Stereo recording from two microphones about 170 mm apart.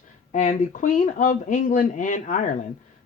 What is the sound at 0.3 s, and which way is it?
Speech, 50° left (ahead or behind).